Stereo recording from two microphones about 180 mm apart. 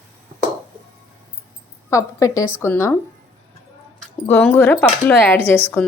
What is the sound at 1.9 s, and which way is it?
Speech, 20° left (ahead or behind).